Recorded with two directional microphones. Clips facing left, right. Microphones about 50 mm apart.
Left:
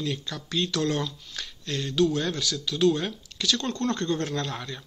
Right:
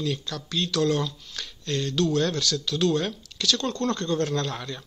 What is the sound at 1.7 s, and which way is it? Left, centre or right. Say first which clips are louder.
Speech: even; centre.